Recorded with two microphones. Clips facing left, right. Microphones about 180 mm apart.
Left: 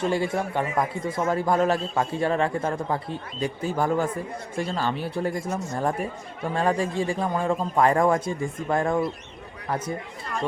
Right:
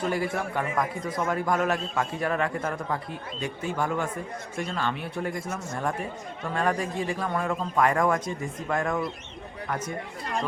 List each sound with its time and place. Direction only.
0.0 s a man's voice: 25° left (ahead or behind)